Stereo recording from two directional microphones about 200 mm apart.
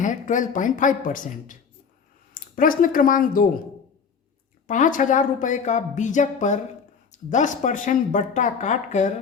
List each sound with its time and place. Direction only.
0.0 s speech: 40° left (ahead or behind)
4.6 s speech: 40° left (ahead or behind)